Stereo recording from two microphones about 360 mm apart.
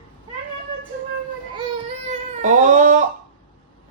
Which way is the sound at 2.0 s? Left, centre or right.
Centre.